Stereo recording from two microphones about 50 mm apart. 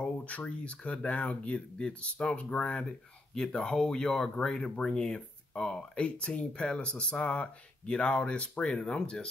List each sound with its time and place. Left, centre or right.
0.0 s speech: left